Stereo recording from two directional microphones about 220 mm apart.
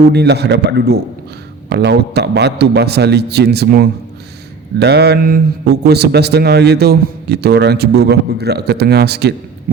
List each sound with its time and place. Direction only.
0.1 s a man's voice: 50° right (ahead or behind)